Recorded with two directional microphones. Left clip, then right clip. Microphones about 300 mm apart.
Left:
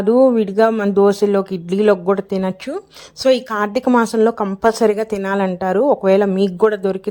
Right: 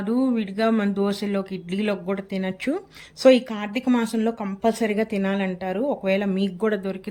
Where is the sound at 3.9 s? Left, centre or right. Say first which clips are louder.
Left 9 dB; left.